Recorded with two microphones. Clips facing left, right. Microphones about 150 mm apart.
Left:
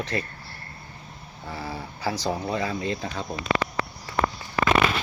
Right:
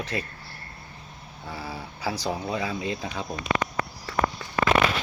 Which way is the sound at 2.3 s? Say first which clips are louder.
Left 2 dB; 5° right (ahead or behind).